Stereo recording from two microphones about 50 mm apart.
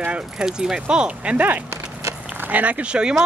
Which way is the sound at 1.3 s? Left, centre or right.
Right.